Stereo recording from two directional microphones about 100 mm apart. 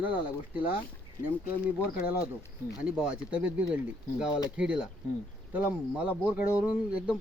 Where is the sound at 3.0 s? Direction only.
15° right (ahead or behind).